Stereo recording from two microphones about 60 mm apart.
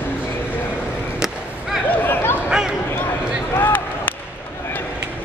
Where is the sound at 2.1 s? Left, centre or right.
Left.